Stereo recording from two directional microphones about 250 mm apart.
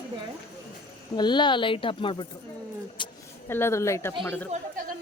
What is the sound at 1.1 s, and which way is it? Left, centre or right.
A woman's voice, centre.